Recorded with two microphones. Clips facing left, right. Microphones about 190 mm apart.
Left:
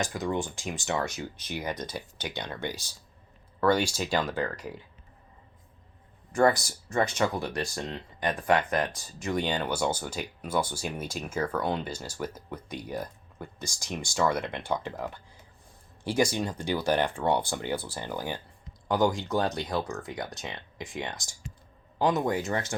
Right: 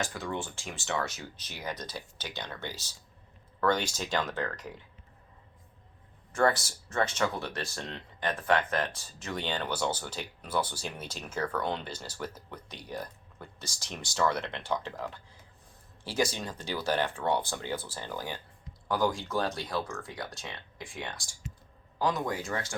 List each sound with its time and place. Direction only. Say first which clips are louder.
0.0 s speech: left 5 dB; 15° left (ahead or behind)
6.3 s speech: left 4 dB; 15° left (ahead or behind)